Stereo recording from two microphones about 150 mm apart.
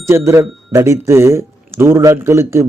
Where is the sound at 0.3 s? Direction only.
20° right (ahead or behind).